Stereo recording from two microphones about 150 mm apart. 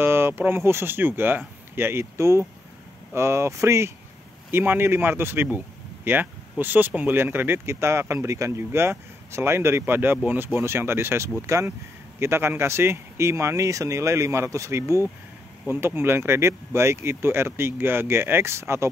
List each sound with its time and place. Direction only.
0.0 s speech: 15° right (ahead or behind)
6.6 s speech: 10° right (ahead or behind)